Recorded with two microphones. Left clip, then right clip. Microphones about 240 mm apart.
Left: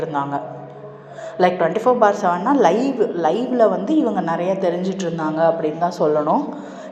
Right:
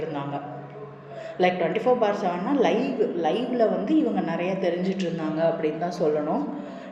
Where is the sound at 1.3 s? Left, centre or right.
Left.